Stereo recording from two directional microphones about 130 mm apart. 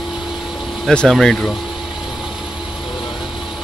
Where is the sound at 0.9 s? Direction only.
5° left (ahead or behind).